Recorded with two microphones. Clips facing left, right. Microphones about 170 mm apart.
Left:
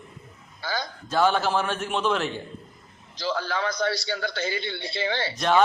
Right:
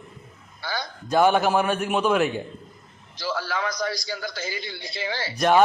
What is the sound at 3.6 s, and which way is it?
A man's voice, 30° left (ahead or behind).